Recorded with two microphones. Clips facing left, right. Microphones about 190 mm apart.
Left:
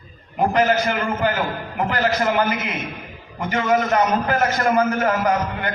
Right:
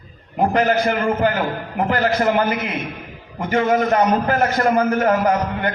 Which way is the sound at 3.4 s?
40° right (ahead or behind).